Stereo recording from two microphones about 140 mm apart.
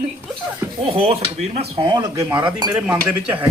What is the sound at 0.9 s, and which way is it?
Speech, 45° right (ahead or behind).